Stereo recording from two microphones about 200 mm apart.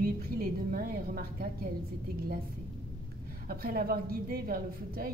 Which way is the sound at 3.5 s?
45° right (ahead or behind).